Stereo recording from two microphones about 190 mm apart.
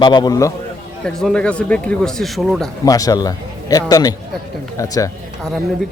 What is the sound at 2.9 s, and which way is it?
A man's voice, 20° left (ahead or behind).